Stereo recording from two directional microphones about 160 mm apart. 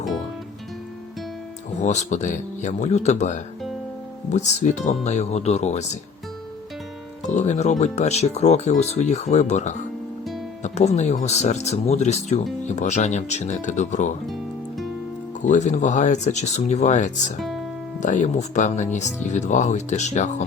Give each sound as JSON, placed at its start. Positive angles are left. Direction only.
{"t": 1.7, "sound": "speech", "side_deg": 45}
{"t": 7.3, "sound": "speech", "side_deg": 50}
{"t": 15.4, "sound": "speech", "side_deg": 50}